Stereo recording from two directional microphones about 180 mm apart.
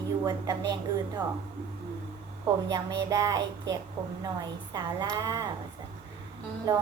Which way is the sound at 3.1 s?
20° right (ahead or behind).